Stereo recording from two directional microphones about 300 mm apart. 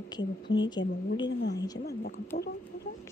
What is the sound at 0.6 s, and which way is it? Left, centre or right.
Speech, centre.